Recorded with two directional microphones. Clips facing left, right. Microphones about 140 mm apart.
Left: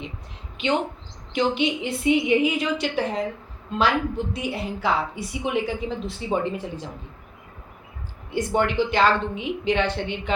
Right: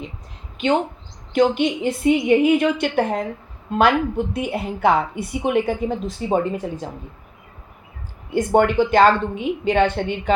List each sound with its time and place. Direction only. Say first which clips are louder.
0.6 s a woman's voice: right 4 dB; 45° right (ahead or behind)
8.3 s a woman's voice: right 6 dB; 50° right (ahead or behind)